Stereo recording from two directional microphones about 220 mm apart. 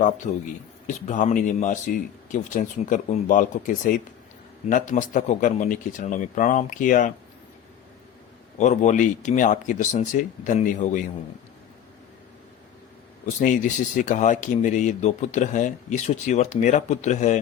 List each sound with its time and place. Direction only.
0.9 s speech: 35° left (ahead or behind)
8.5 s speech: 35° left (ahead or behind)
13.4 s speech: 35° left (ahead or behind)